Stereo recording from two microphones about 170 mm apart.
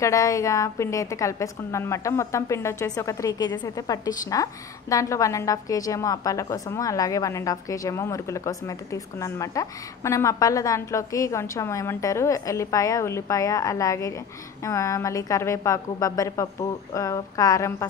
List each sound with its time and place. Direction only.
0.0 s a woman's voice: 20° left (ahead or behind)